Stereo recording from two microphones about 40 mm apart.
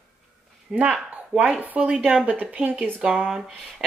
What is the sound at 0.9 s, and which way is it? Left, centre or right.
Speech, right.